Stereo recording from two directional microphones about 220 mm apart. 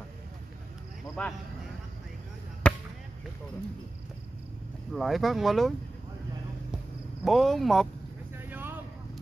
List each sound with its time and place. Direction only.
1.2 s speech: 5° left (ahead or behind)
2.6 s basketball bounce: 5° left (ahead or behind)
4.9 s speech: centre (ahead or behind)
7.2 s speech: centre (ahead or behind)
8.5 s vehicle: 10° right (ahead or behind)